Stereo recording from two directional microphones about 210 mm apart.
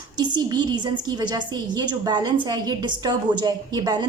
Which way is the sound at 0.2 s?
20° right (ahead or behind).